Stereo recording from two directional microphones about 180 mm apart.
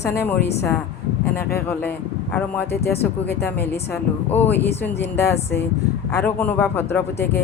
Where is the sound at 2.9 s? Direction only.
60° left (ahead or behind).